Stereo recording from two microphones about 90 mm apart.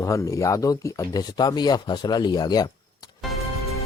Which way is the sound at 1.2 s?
50° left (ahead or behind).